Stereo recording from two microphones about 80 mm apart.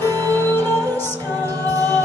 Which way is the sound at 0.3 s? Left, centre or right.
Left.